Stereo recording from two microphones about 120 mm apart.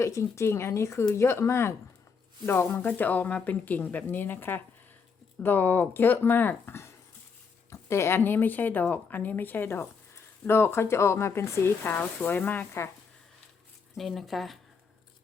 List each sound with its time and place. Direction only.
0.0 s speech: 25° left (ahead or behind)
13.9 s speech: centre (ahead or behind)